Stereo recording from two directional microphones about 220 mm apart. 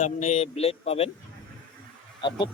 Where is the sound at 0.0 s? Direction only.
30° left (ahead or behind).